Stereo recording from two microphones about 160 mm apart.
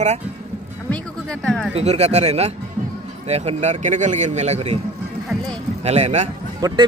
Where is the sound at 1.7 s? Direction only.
40° right (ahead or behind).